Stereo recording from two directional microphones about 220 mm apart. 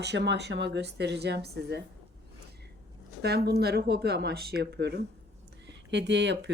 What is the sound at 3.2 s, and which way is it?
A woman's voice, 45° right (ahead or behind).